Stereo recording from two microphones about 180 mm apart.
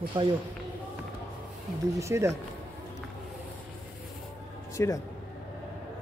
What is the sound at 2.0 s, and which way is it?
Speech, 15° right (ahead or behind).